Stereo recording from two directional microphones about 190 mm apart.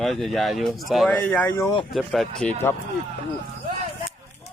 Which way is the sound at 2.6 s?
10° left (ahead or behind).